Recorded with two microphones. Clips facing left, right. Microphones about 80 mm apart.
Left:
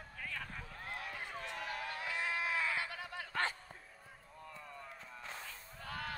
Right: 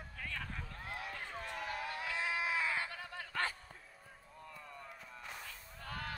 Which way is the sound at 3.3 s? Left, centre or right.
Left.